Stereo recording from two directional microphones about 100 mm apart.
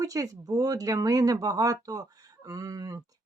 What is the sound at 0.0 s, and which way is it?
Speech, 35° right (ahead or behind).